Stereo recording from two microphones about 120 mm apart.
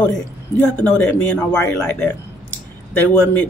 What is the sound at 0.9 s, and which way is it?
Speech, 10° left (ahead or behind).